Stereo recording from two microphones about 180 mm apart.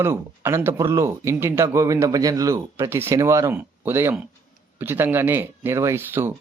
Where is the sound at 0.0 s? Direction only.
15° right (ahead or behind).